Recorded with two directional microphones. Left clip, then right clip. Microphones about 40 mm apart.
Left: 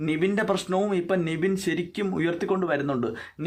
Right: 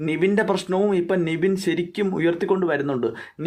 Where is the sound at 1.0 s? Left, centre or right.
Right.